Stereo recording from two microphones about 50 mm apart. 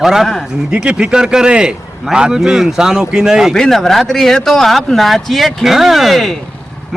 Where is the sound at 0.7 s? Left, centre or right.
Centre.